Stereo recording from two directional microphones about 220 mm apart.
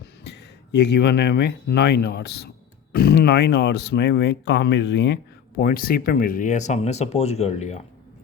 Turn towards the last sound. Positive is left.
turn(degrees=30)  # may be behind; listen again after turning